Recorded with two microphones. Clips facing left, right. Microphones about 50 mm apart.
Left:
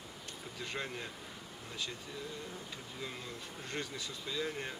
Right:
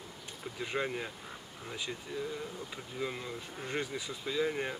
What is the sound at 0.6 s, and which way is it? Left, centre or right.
Speech, centre.